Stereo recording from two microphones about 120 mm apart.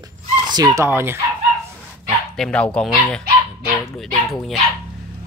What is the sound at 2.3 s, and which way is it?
Speech, 5° left (ahead or behind).